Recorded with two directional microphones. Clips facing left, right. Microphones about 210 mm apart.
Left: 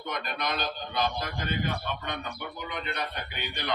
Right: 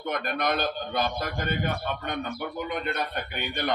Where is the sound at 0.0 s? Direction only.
55° right (ahead or behind).